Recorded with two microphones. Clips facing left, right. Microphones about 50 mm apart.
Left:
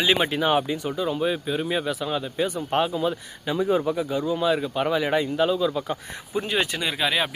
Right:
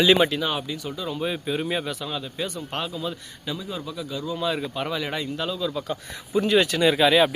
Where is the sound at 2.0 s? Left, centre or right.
Centre.